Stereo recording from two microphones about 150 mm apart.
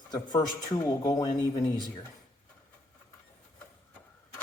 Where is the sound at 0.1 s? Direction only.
25° left (ahead or behind).